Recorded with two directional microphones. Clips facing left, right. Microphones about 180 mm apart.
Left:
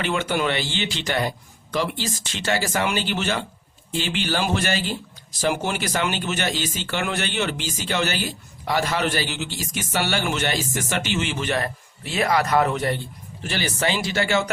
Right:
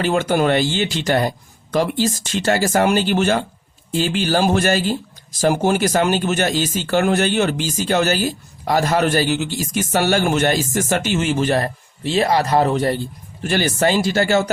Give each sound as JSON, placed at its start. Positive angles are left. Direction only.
{"t": 0.0, "sound": "a man's voice", "side_deg": -40}
{"t": 13.4, "sound": "a man's voice", "side_deg": -50}